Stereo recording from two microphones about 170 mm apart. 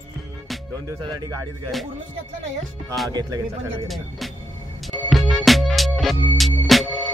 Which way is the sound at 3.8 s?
Centre (ahead or behind).